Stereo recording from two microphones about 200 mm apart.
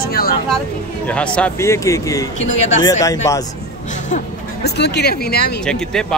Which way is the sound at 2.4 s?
70° left (ahead or behind).